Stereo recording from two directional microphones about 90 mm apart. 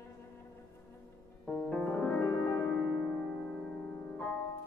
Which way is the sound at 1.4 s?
10° left (ahead or behind).